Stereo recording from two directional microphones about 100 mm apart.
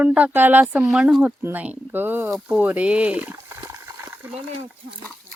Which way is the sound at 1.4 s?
15° right (ahead or behind).